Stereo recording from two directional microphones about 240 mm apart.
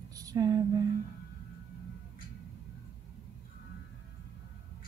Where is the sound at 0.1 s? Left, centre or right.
Centre.